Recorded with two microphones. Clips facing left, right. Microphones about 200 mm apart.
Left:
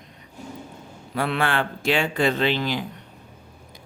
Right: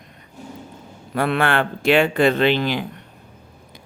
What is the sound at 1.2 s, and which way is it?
Speech, 55° right (ahead or behind).